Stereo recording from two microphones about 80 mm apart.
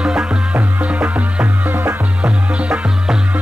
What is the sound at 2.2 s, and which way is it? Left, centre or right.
Music, centre.